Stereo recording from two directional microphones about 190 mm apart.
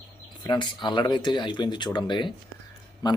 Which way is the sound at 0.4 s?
20° left (ahead or behind).